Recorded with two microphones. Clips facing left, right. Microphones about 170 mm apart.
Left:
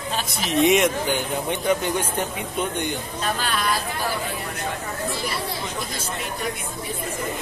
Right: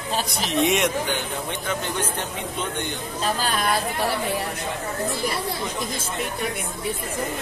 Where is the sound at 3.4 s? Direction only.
45° right (ahead or behind).